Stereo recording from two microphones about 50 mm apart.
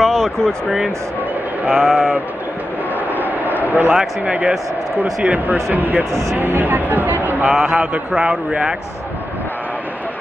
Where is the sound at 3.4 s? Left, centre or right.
Right.